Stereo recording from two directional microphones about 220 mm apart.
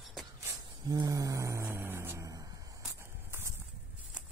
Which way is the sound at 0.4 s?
15° right (ahead or behind).